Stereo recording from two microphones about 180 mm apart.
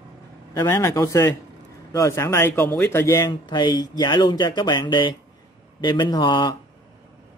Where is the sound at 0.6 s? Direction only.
15° left (ahead or behind).